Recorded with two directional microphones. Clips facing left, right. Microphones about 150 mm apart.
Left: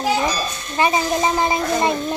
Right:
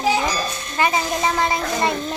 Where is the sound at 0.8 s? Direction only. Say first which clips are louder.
Left 2 dB; 20° left (ahead or behind).